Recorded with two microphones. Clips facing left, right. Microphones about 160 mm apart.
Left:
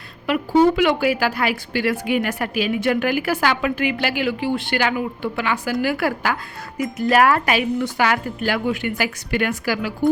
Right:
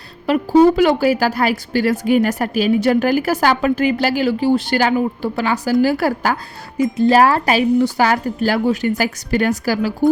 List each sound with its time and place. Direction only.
0.3 s speech: 35° right (ahead or behind)
6.7 s speech: 25° right (ahead or behind)